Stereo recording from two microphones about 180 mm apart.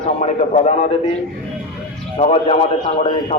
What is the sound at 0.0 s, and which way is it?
Speech, 40° left (ahead or behind).